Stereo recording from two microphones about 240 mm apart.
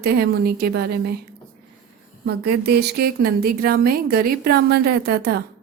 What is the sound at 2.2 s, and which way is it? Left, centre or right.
A woman's voice, right.